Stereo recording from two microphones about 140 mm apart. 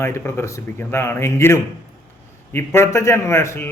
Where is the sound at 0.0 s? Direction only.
20° left (ahead or behind).